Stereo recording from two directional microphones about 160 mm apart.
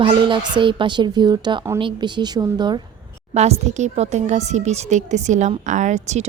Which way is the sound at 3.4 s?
40° right (ahead or behind).